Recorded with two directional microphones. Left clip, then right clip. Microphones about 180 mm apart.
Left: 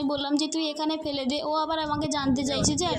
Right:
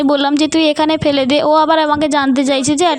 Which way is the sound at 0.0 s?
45° right (ahead or behind).